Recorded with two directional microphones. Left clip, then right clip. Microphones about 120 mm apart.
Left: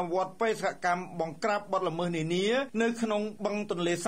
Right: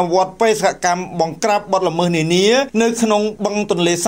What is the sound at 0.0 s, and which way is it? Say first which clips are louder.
Speech: right 14 dB; 15° right (ahead or behind).